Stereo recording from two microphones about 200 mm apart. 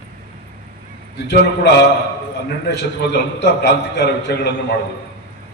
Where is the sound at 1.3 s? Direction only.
55° left (ahead or behind).